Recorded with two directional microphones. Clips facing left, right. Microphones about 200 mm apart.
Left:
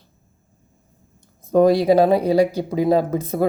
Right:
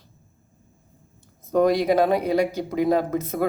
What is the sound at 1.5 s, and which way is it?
A woman's voice, 30° left (ahead or behind).